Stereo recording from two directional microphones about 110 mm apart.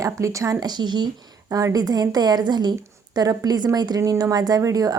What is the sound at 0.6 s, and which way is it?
Speech, 40° right (ahead or behind).